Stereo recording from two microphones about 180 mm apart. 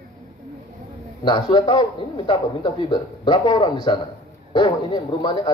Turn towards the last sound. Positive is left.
turn(degrees=25)  # may be behind; listen again after turning